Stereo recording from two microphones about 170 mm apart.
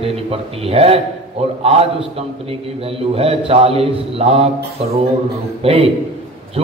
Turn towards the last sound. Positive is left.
turn(degrees=-35)  # may be behind; listen again after turning